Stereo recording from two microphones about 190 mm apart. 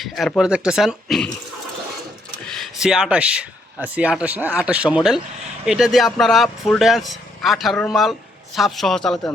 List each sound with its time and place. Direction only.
0.0 s speech: centre (ahead or behind)
2.5 s speech: centre (ahead or behind)